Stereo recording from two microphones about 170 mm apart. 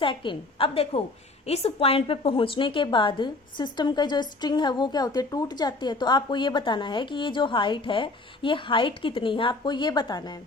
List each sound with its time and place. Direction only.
0.0 s a woman's voice: 30° left (ahead or behind)